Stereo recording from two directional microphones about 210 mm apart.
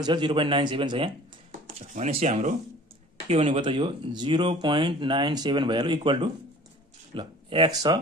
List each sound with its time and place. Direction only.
0.0 s speech: 20° right (ahead or behind)